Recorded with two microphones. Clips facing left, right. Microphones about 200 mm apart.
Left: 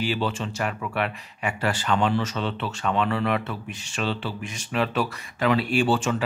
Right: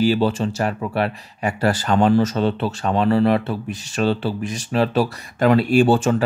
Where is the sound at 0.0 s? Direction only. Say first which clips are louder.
Right 9 dB; 40° right (ahead or behind).